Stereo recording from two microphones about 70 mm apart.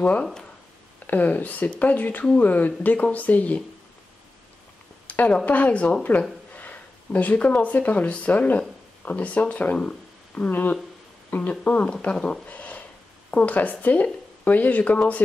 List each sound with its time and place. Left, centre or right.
0.0 s speech: centre
0.9 s speech: left
5.0 s speech: left
6.1 s speech: left; by 12.4 s centre
12.4 s a sound: centre
13.3 s speech: left